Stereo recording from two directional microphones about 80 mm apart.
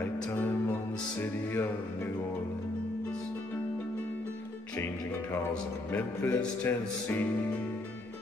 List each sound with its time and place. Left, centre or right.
0.0 s music: left
5.9 s music: left